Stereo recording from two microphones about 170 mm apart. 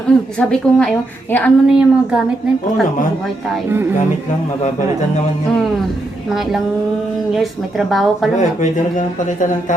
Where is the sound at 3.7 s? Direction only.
15° right (ahead or behind).